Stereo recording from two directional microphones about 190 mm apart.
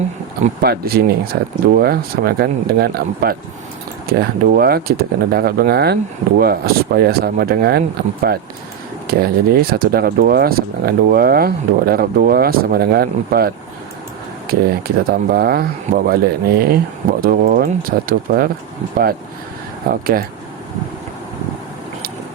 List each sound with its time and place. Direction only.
0.6 s speech: 55° right (ahead or behind)
19.9 s speech: 50° right (ahead or behind)